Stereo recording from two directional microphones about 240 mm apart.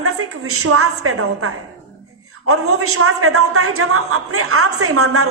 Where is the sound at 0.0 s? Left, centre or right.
Right.